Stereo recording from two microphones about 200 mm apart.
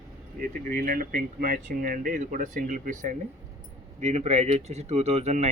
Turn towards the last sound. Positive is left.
turn(degrees=-35)  # may be behind; listen again after turning